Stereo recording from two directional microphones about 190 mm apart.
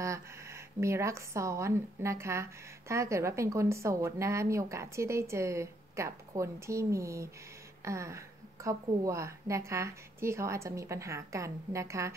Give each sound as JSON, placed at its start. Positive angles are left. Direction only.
{"t": 0.0, "sound": "speech", "side_deg": -15}